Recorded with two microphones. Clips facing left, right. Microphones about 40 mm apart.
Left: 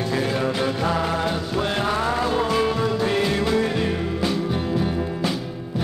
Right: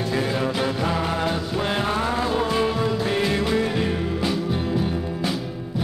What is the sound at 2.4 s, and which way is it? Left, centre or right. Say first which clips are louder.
Music: left 1 dB; centre.